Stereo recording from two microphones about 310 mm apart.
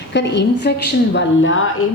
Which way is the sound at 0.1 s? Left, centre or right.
Left.